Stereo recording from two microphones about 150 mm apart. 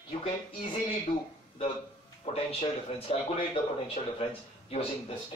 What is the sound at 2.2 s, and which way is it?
Speech, 40° left (ahead or behind).